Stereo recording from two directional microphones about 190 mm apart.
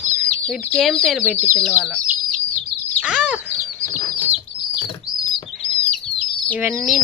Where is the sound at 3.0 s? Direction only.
5° right (ahead or behind).